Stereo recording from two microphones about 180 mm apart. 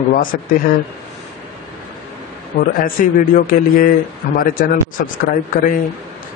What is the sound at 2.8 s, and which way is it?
Speech, 50° left (ahead or behind).